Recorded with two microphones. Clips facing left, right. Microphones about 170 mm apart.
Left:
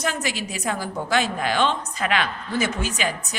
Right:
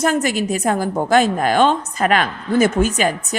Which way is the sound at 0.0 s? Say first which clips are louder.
Right 9 dB; 50° right (ahead or behind).